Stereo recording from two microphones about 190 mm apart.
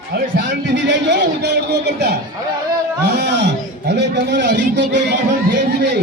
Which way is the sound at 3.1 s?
65° right (ahead or behind).